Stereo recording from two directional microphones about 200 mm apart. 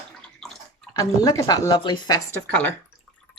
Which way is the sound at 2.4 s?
10° left (ahead or behind).